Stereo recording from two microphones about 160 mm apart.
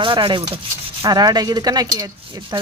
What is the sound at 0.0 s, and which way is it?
Speech, 30° right (ahead or behind).